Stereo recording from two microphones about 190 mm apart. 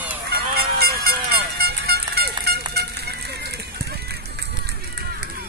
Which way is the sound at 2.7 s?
60° right (ahead or behind).